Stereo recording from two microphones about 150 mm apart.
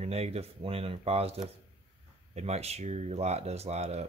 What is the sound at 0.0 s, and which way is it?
Speech, 45° right (ahead or behind).